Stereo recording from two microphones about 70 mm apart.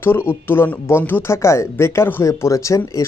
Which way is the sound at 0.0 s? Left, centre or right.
Left.